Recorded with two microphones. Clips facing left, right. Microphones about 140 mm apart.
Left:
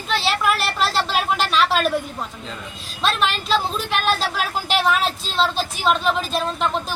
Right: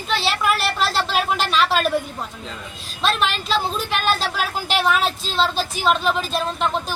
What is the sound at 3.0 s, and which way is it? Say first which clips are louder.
A woman's voice: even; centre (ahead or behind).